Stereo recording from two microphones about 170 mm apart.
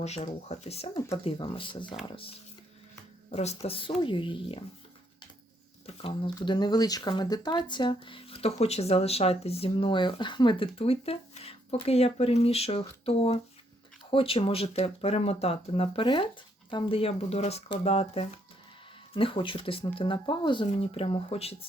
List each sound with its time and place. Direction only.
0.0 s speech: 40° left (ahead or behind)
5.8 s speech: 35° left (ahead or behind)